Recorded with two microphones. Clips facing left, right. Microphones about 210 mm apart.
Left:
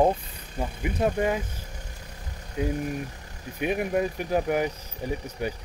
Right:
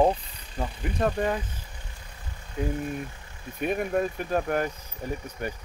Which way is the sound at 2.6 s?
15° left (ahead or behind).